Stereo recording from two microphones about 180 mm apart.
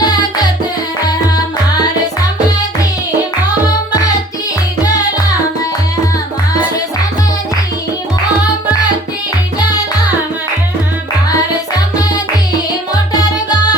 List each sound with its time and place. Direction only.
0.0 s music: 20° left (ahead or behind)